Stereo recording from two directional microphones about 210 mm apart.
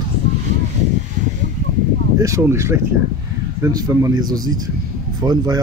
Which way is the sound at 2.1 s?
15° right (ahead or behind).